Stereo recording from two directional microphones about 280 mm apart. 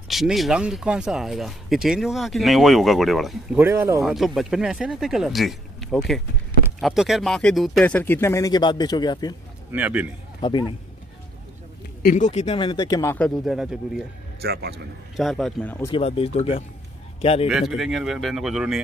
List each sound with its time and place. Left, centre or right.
0.1 s speech: centre
9.7 s a man's voice: centre
10.4 s speech: centre
12.0 s speech: left; by 14.0 s centre
14.4 s a man's voice: right
15.1 s speech: centre
15.9 s a man's voice: left
17.5 s speech: centre